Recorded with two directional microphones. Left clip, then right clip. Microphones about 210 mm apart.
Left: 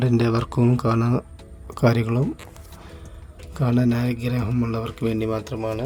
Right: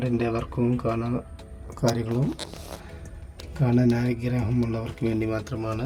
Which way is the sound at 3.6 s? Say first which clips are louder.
Left 1 dB; 20° left (ahead or behind).